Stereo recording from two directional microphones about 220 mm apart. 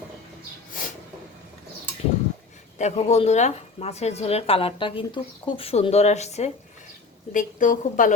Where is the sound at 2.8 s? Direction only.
30° left (ahead or behind).